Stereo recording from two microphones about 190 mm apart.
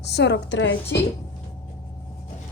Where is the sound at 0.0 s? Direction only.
65° left (ahead or behind).